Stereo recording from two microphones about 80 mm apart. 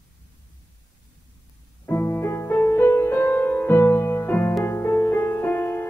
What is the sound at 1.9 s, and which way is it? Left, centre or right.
Music, left.